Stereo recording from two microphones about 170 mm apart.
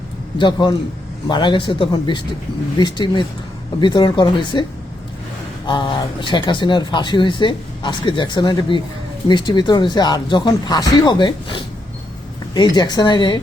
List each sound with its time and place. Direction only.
0.3 s speech: 30° left (ahead or behind)
5.6 s speech: 30° left (ahead or behind)